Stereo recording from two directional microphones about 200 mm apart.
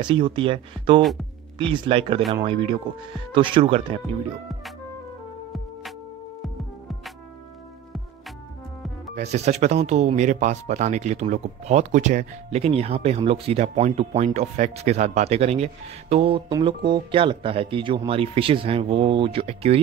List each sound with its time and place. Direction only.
0.0 s speech: 25° right (ahead or behind)
9.1 s speech: 35° right (ahead or behind)